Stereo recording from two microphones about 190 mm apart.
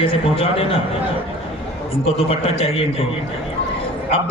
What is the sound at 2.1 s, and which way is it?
Speech, 30° left (ahead or behind).